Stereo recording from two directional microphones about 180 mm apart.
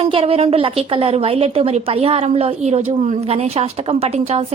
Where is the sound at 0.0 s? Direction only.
30° right (ahead or behind).